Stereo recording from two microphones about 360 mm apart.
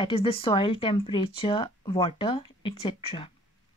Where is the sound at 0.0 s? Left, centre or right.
Centre.